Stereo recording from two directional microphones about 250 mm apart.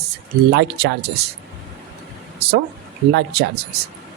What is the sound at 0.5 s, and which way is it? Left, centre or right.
Speech, right.